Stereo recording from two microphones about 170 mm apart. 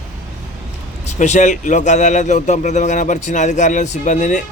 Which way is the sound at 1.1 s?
45° left (ahead or behind).